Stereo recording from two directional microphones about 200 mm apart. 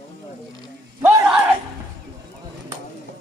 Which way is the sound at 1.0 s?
5° right (ahead or behind).